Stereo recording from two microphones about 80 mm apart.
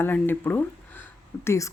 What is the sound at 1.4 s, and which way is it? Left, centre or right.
Speech, left.